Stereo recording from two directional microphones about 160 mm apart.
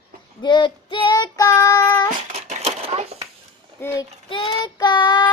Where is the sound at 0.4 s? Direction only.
30° left (ahead or behind).